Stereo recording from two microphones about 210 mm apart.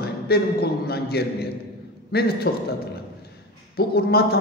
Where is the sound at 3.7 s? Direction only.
50° left (ahead or behind).